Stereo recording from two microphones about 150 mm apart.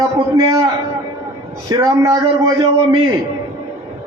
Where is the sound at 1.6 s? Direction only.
20° right (ahead or behind).